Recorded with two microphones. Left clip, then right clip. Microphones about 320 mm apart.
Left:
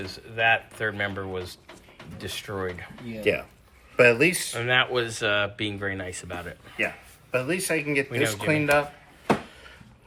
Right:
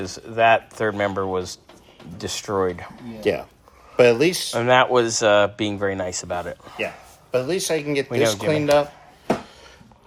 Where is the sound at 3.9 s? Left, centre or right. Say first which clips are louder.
Right 3 dB; right.